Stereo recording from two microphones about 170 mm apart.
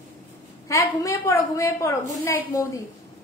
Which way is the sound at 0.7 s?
20° left (ahead or behind).